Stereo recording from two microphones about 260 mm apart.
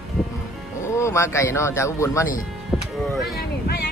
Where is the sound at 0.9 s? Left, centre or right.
Centre.